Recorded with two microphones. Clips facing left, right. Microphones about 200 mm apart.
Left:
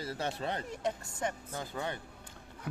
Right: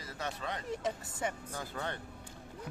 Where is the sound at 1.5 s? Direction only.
15° left (ahead or behind).